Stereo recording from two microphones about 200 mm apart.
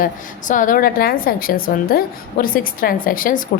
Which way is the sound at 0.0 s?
40° left (ahead or behind).